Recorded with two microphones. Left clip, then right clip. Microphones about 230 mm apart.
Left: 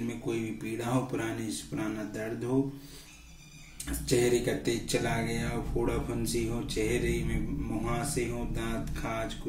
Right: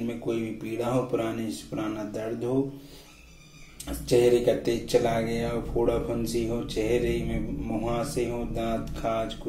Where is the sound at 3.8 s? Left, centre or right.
Left.